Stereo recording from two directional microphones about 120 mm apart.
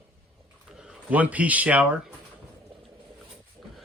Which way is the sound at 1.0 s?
10° right (ahead or behind).